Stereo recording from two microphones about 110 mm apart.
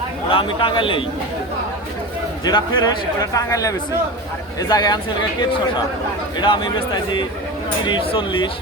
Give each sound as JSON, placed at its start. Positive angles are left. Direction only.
{"t": 0.3, "sound": "a man's voice", "side_deg": 55}
{"t": 2.4, "sound": "a man's voice", "side_deg": 40}